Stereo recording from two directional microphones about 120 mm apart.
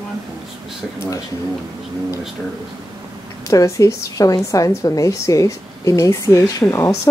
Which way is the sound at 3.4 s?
25° left (ahead or behind).